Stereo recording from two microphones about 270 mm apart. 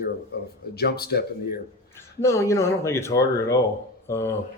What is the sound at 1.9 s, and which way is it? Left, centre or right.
Speech, centre.